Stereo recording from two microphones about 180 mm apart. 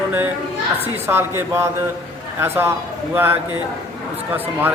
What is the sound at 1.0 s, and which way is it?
A man's voice, 15° right (ahead or behind).